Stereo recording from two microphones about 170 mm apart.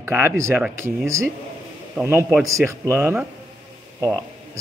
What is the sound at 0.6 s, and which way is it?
Speech, 5° right (ahead or behind).